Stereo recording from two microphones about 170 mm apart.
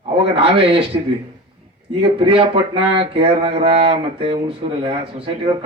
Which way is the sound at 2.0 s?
30° right (ahead or behind).